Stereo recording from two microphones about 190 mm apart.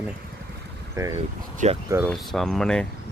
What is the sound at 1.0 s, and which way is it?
Speech, 15° right (ahead or behind).